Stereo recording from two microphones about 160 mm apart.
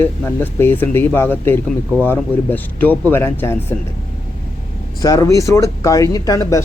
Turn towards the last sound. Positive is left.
turn(degrees=20)  # may be behind; listen again after turning